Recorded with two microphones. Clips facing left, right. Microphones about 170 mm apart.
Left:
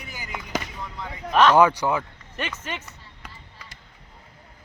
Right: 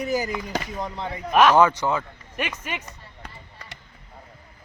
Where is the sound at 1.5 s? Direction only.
10° left (ahead or behind).